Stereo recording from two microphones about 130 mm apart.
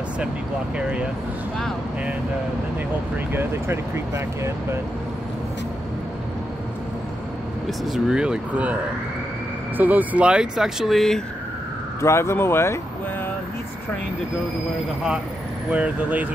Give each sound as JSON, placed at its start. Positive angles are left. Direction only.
{"t": 0.7, "sound": "speech", "side_deg": -10}
{"t": 3.3, "sound": "speech", "side_deg": -20}
{"t": 7.8, "sound": "speech", "side_deg": -5}
{"t": 9.8, "sound": "speech", "side_deg": -10}
{"t": 12.0, "sound": "speech", "side_deg": 20}
{"t": 15.7, "sound": "speech", "side_deg": -10}